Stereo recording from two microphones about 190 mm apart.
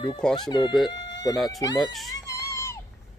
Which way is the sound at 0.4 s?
25° left (ahead or behind).